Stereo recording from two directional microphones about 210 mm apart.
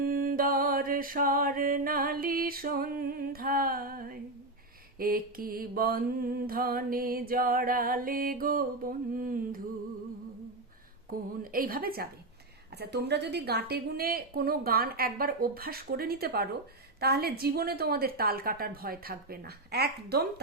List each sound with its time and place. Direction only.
0.0 s mantra: 40° right (ahead or behind)
11.1 s mantra: 40° right (ahead or behind)